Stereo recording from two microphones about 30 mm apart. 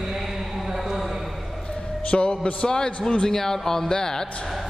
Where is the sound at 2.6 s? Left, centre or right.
Left.